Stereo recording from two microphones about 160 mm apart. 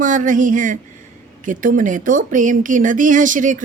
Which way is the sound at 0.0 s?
55° right (ahead or behind).